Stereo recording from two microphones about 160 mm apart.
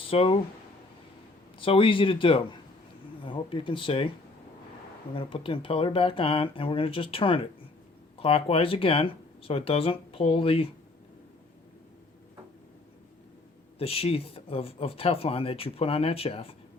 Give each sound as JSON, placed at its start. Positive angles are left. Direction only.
{"t": 0.0, "sound": "speech", "side_deg": 35}
{"t": 1.5, "sound": "speech", "side_deg": 35}
{"t": 5.1, "sound": "speech", "side_deg": 35}
{"t": 13.7, "sound": "speech", "side_deg": 35}